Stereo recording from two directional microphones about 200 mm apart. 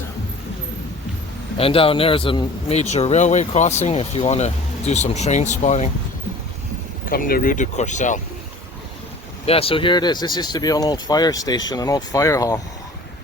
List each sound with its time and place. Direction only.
1.5 s speech: 30° left (ahead or behind)
7.0 s speech: 45° left (ahead or behind)
9.5 s speech: 30° left (ahead or behind)